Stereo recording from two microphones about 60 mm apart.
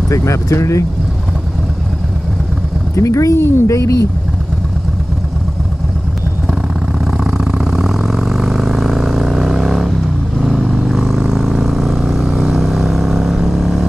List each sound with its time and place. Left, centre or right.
0.1 s speech: left
3.0 s speech: left
3.4 s speech: left
3.7 s speech: left
7.3 s vehicle: centre